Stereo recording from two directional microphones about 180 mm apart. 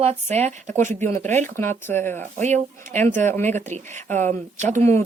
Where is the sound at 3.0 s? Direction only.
10° left (ahead or behind).